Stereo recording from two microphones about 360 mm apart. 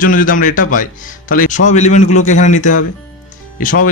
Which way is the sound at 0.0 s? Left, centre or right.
Left.